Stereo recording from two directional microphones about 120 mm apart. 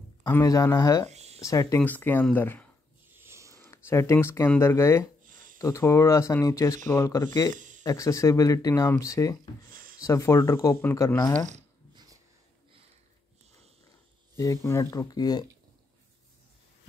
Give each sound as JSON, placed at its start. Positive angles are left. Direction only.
{"t": 0.3, "sound": "speech", "side_deg": 25}
{"t": 1.1, "sound": "a sound", "side_deg": -65}
{"t": 1.4, "sound": "speech", "side_deg": 25}
{"t": 1.8, "sound": "speech", "side_deg": 15}
{"t": 3.1, "sound": "a sound", "side_deg": -20}
{"t": 3.6, "sound": "speech", "side_deg": 20}
{"t": 7.5, "sound": "a sound", "side_deg": -90}
{"t": 7.8, "sound": "speech", "side_deg": 30}
{"t": 11.9, "sound": "wheeze", "side_deg": -35}
{"t": 14.3, "sound": "speech", "side_deg": 25}